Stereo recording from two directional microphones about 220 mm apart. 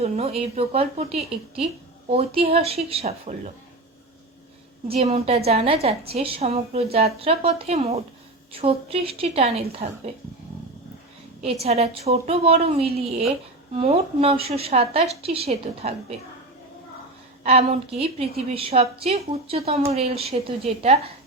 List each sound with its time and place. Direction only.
0.0 s a woman's voice: 30° right (ahead or behind)
4.9 s a woman's voice: 30° right (ahead or behind)
11.6 s a woman's voice: 30° right (ahead or behind)
17.4 s a woman's voice: 30° right (ahead or behind)